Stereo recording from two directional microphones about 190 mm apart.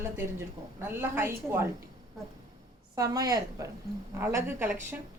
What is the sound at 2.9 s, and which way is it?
A woman's voice, 20° right (ahead or behind).